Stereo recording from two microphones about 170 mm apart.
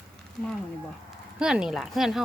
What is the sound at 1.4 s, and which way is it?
Speech, 5° right (ahead or behind).